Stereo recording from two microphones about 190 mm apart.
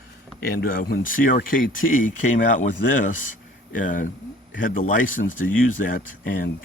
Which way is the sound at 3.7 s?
45° left (ahead or behind).